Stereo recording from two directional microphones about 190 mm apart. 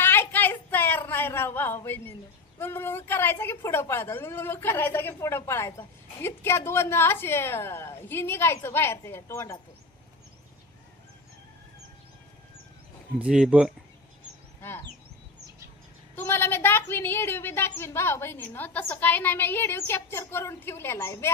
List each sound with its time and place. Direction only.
0.0 s a sound: 10° left (ahead or behind)
2.6 s a woman's voice: 10° left (ahead or behind)
13.1 s speech: 5° right (ahead or behind)
14.6 s speech: 10° left (ahead or behind)
16.1 s a woman's voice: 10° left (ahead or behind)